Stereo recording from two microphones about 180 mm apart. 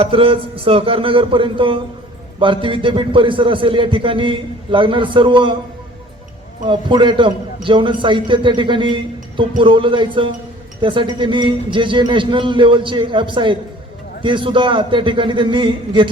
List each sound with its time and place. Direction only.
0.0 s a man's voice: 30° right (ahead or behind)
6.7 s a man's voice: 25° right (ahead or behind)